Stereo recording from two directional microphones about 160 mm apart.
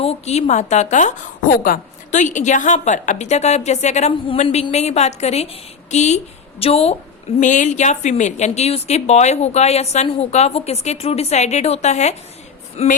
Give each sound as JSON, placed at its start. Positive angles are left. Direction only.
{"t": 0.0, "sound": "a woman's voice", "side_deg": 40}
{"t": 7.3, "sound": "a woman's voice", "side_deg": 50}